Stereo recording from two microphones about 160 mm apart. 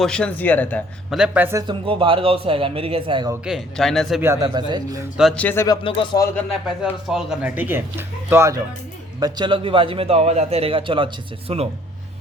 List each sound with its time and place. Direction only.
0.0 s speech: 5° left (ahead or behind)
1.1 s speech: 5° right (ahead or behind)
1.6 s a man's voice: 35° right (ahead or behind)
3.4 s speech: centre (ahead or behind)
4.2 s speech: 20° right (ahead or behind)
5.3 s speech: 10° left (ahead or behind)
5.6 s speech: 30° left (ahead or behind)
6.3 s speech: 10° left (ahead or behind)
7.1 s speech: 5° right (ahead or behind)
9.2 s a man's voice: 25° right (ahead or behind)